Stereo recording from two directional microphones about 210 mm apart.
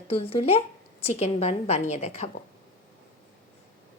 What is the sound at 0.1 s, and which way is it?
Speech, 30° left (ahead or behind).